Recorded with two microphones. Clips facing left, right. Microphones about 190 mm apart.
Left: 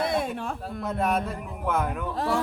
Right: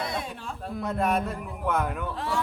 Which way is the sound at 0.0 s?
55° left (ahead or behind).